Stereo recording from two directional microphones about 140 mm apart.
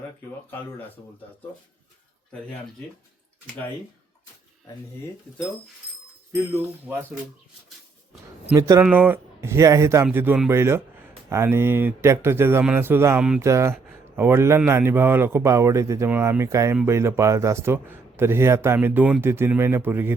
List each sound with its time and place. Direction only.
6.3 s a man's voice: 20° right (ahead or behind)
8.5 s a man's voice: 20° right (ahead or behind)